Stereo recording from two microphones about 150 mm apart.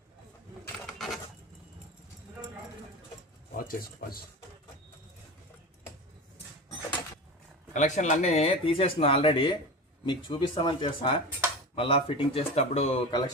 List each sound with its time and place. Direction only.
0.9 s coin: centre (ahead or behind)
3.6 s speech: 75° left (ahead or behind)
7.7 s speech: 55° left (ahead or behind)
13.1 s speech: 30° left (ahead or behind)